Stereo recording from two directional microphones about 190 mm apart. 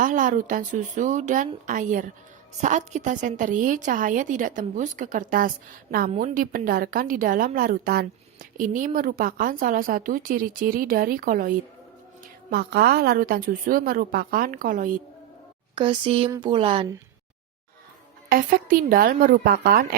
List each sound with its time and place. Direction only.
0.0 s a woman's voice: 45° right (ahead or behind)
15.7 s speech: 25° right (ahead or behind)
18.3 s a woman's voice: 50° right (ahead or behind)